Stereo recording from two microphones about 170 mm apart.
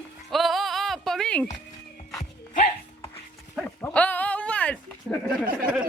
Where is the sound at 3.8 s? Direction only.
10° left (ahead or behind).